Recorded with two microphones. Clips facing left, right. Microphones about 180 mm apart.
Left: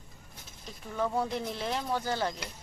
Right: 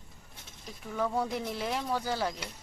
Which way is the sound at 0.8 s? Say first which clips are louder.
Even; 5° right (ahead or behind).